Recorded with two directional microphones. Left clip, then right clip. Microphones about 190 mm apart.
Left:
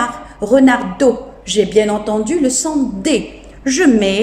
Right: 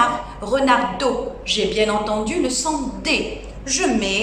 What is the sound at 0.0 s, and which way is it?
A man's voice, 35° left (ahead or behind).